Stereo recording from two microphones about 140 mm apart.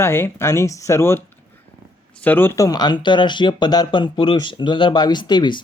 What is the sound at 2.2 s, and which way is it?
Speech, 15° left (ahead or behind).